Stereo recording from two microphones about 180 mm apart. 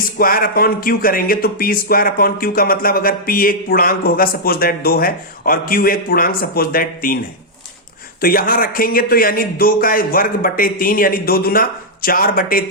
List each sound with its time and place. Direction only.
0.2 s speech: 55° left (ahead or behind)
8.2 s speech: 55° left (ahead or behind)